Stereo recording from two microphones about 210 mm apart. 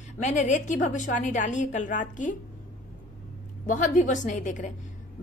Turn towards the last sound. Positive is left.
turn(degrees=35)  # may be behind; listen again after turning